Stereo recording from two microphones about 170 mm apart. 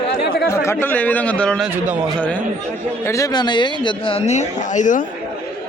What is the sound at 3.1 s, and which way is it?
Speech, 20° left (ahead or behind).